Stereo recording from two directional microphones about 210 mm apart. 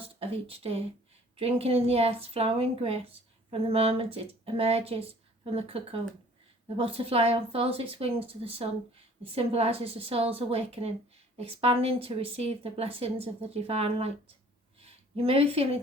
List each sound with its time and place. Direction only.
0.0 s a woman's voice: 25° right (ahead or behind)